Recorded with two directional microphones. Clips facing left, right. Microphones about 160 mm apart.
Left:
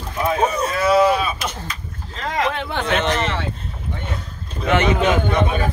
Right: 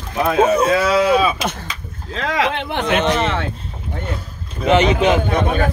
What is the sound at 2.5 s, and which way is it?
Speech, 20° right (ahead or behind).